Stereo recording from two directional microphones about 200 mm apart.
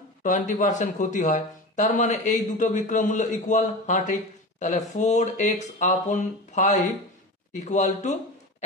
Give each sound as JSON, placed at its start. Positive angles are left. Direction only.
{"t": 0.2, "sound": "speech", "side_deg": 40}